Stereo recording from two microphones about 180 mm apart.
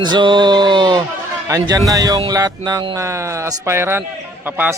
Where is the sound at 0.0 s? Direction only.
25° right (ahead or behind).